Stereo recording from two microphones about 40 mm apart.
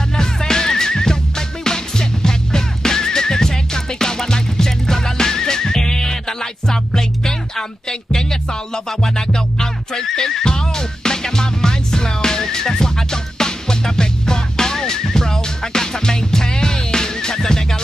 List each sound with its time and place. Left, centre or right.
0.2 s music: centre